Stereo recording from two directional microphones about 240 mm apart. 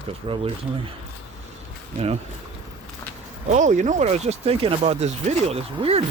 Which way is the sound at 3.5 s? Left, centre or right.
Right.